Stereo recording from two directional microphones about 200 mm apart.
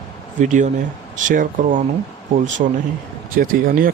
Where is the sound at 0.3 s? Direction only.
40° right (ahead or behind).